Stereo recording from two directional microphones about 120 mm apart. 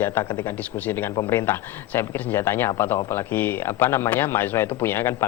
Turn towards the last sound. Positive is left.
turn(degrees=20)  # may be behind; listen again after turning